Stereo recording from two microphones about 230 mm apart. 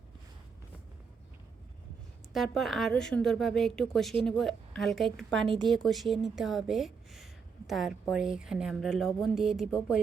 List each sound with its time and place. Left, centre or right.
2.3 s speech: centre